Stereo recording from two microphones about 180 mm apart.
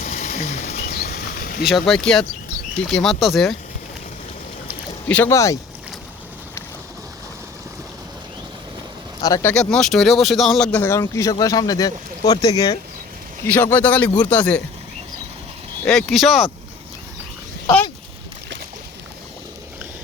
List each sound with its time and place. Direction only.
0.0 s a sound: 45° left (ahead or behind)
1.6 s speech: centre (ahead or behind)
5.0 s speech: 10° left (ahead or behind)
9.2 s speech: 20° left (ahead or behind)
9.5 s speech: 5° left (ahead or behind); by 12.8 s 20° left (ahead or behind)
13.4 s speech: 10° left (ahead or behind)
15.8 s speech: 5° left (ahead or behind)